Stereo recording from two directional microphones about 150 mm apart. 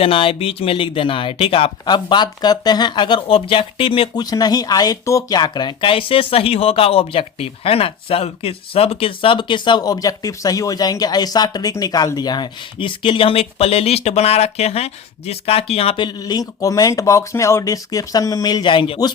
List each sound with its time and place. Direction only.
0.0 s speech: 35° left (ahead or behind)